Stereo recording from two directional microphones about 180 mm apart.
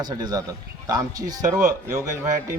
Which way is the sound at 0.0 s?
20° right (ahead or behind).